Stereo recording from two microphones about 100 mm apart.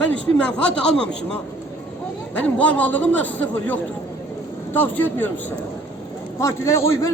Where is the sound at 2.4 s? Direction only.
15° left (ahead or behind).